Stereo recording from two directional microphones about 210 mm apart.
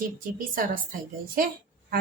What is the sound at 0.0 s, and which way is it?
Speech, 40° right (ahead or behind).